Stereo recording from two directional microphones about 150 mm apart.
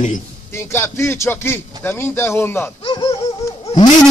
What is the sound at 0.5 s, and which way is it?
Speech, 15° left (ahead or behind).